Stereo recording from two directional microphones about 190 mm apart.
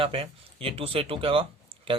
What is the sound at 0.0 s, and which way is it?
Speech, 30° right (ahead or behind).